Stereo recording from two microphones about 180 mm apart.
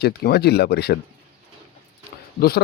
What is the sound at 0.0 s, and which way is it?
Speech, 60° left (ahead or behind).